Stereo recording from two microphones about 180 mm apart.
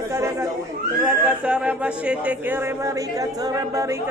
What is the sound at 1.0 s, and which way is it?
Speech, 5° right (ahead or behind).